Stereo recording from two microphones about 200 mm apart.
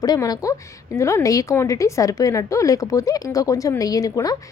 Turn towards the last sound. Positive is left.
turn(degrees=15)  # may be behind; listen again after turning